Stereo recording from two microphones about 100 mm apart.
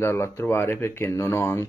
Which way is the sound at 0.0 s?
25° left (ahead or behind).